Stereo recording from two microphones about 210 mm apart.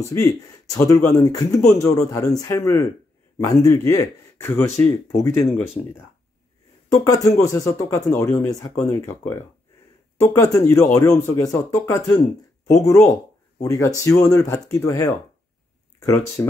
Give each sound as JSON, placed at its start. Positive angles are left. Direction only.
{"t": 0.1, "sound": "speech", "side_deg": 15}
{"t": 7.1, "sound": "speech", "side_deg": 15}